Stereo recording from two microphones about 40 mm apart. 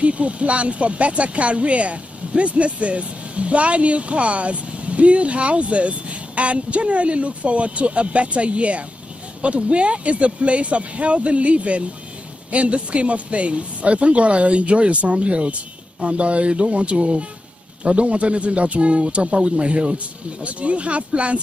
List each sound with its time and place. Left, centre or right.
0.0 s speech: right